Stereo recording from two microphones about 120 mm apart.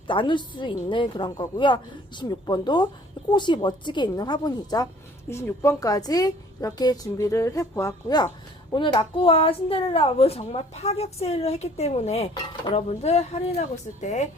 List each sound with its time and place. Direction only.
0.1 s a woman's voice: 45° left (ahead or behind)
5.3 s a woman's voice: 25° left (ahead or behind)
8.7 s a woman's voice: 45° left (ahead or behind); by 14.3 s 75° left (ahead or behind)